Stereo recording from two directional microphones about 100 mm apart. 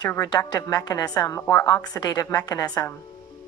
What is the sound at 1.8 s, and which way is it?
A woman's voice, 40° left (ahead or behind).